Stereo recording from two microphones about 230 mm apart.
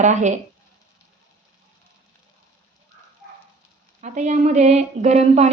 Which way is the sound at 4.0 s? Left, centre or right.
Right.